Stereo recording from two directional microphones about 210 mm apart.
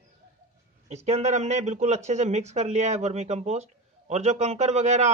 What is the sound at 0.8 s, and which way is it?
A man's voice, 30° right (ahead or behind).